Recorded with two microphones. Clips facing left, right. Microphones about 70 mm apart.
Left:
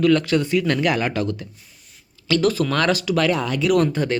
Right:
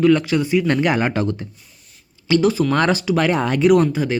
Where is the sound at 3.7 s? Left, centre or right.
Centre.